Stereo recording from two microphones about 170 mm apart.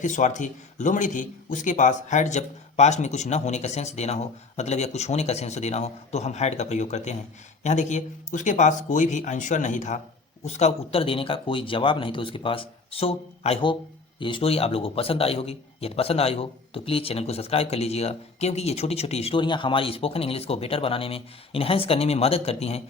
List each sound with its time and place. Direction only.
0.0 s a man's voice: 45° left (ahead or behind)